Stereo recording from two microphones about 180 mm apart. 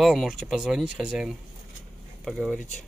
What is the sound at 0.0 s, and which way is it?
Speech, centre (ahead or behind).